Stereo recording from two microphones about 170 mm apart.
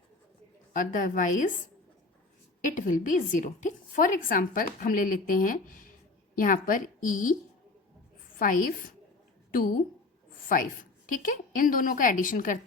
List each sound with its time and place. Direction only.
0.7 s a woman's voice: 50° left (ahead or behind)
2.6 s a woman's voice: 50° left (ahead or behind)
8.4 s a woman's voice: 55° left (ahead or behind)
10.5 s a woman's voice: 50° left (ahead or behind)